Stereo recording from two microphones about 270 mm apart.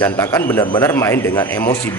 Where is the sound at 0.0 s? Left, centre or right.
Centre.